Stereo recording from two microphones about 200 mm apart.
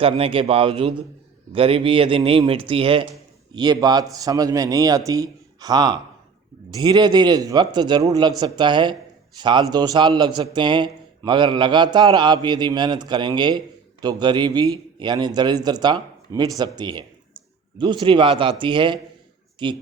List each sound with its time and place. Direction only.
0.0 s a man's voice: 25° right (ahead or behind)